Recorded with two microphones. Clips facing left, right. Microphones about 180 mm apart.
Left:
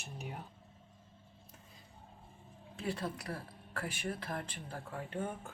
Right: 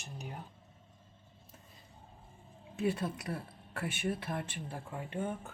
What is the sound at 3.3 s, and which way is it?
Speech, 25° right (ahead or behind).